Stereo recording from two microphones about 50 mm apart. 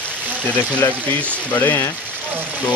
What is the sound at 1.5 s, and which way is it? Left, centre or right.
Speech, left.